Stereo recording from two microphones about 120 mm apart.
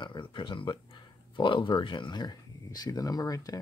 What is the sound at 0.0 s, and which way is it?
Speech, 40° left (ahead or behind).